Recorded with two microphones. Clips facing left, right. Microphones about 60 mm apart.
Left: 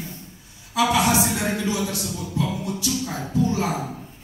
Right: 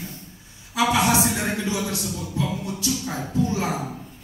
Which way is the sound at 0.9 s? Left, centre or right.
Right.